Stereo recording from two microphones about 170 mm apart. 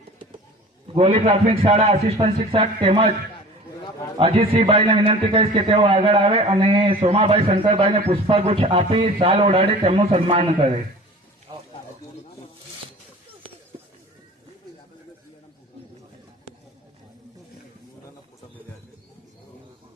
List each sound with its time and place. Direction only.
0.9 s a man's voice: 35° right (ahead or behind)
4.2 s a man's voice: 35° right (ahead or behind)
11.5 s a sound: 25° right (ahead or behind)